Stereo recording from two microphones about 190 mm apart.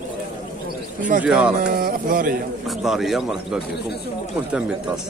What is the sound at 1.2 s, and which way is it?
Speech, 5° right (ahead or behind).